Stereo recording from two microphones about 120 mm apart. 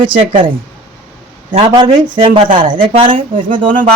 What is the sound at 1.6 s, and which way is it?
Speech, 40° right (ahead or behind).